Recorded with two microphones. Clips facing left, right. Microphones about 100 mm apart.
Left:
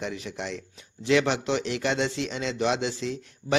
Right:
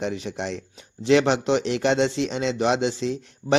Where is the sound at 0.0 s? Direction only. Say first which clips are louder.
Right 5 dB; 25° right (ahead or behind).